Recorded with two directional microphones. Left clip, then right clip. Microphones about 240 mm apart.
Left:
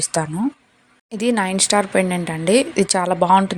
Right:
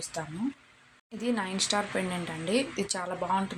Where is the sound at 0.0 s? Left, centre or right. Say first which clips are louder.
Left 13 dB; left.